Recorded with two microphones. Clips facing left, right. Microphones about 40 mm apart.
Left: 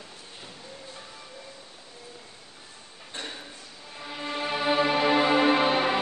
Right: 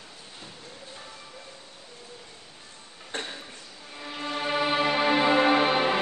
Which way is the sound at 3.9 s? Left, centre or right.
Centre.